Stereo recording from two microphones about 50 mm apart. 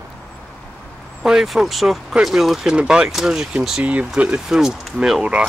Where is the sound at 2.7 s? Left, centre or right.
Centre.